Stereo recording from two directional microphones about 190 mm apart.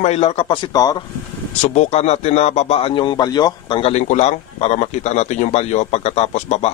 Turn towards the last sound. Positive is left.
turn(degrees=35)  # may be behind; listen again after turning